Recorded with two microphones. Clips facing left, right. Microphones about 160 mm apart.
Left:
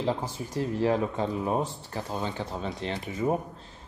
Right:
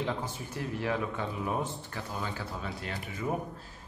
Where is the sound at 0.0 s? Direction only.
35° left (ahead or behind).